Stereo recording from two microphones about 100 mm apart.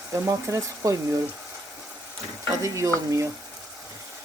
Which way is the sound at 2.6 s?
30° right (ahead or behind).